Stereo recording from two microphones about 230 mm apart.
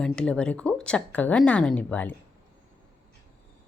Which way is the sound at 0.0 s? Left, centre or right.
Centre.